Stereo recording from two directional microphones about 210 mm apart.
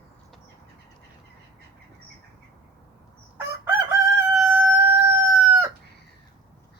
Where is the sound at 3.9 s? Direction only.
10° right (ahead or behind).